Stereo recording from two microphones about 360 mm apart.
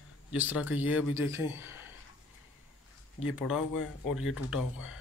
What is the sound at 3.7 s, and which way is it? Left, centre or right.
Speech, left.